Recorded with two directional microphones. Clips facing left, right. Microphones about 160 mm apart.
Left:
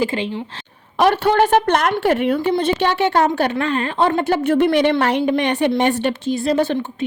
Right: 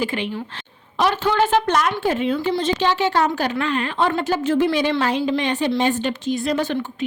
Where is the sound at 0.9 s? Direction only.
60° left (ahead or behind).